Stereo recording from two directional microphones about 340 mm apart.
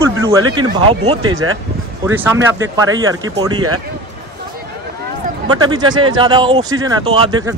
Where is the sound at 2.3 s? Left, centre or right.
Right.